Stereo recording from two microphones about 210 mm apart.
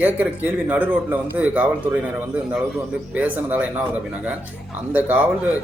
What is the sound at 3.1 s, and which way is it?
Speech, 5° right (ahead or behind).